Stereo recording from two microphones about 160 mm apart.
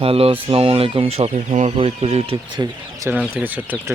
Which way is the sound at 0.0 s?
35° right (ahead or behind).